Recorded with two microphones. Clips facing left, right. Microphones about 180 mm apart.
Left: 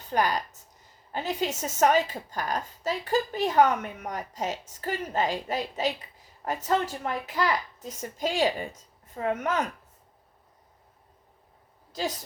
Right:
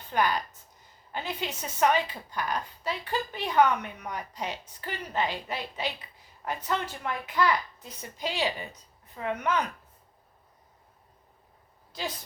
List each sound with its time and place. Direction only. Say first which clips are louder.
0.0 s a woman's voice: left 1 dB; 40° left (ahead or behind)
11.9 s a woman's voice: left 4 dB; 40° left (ahead or behind)